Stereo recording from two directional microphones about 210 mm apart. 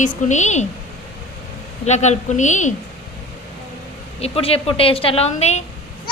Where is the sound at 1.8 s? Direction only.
35° left (ahead or behind).